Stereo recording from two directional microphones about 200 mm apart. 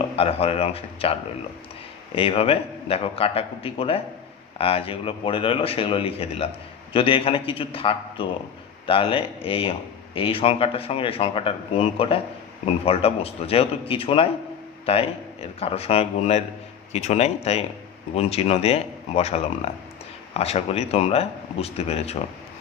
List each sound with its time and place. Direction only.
0.2 s speech: 30° left (ahead or behind)
2.1 s speech: 30° left (ahead or behind)